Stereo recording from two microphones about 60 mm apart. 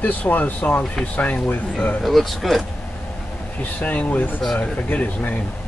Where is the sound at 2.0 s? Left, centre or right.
Centre.